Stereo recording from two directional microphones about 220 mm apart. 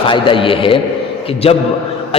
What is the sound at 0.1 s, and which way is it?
A man's voice, 25° left (ahead or behind).